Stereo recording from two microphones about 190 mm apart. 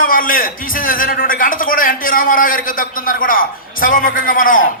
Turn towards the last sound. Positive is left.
turn(degrees=45)  # may be behind; listen again after turning